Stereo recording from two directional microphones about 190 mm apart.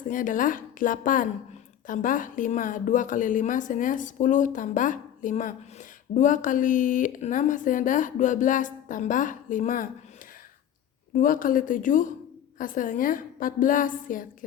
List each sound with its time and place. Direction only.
0.1 s speech: 45° left (ahead or behind)
11.1 s speech: 45° left (ahead or behind)